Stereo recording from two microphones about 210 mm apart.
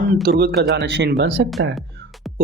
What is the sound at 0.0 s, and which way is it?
Speech, 45° right (ahead or behind).